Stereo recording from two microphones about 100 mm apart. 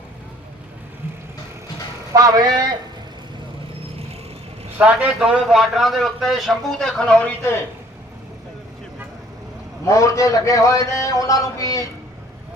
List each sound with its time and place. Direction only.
2.1 s a man's voice: 40° right (ahead or behind)
4.8 s a man's voice: 15° right (ahead or behind); by 7.3 s 5° left (ahead or behind)
9.8 s a man's voice: 30° left (ahead or behind)